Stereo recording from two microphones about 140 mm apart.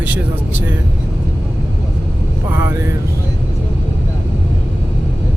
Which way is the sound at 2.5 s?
15° right (ahead or behind).